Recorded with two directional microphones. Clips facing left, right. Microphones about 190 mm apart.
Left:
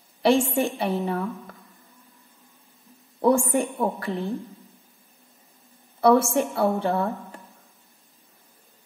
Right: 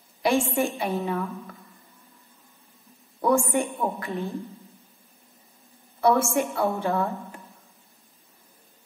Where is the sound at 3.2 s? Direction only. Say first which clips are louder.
Left 2 dB; 35° left (ahead or behind).